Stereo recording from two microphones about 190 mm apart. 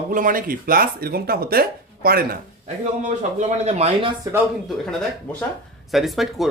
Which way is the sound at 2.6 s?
35° right (ahead or behind).